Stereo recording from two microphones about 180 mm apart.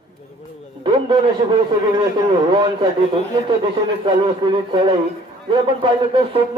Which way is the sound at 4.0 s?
30° right (ahead or behind).